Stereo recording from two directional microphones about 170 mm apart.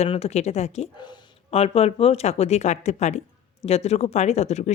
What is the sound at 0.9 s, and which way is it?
Speech, 25° left (ahead or behind).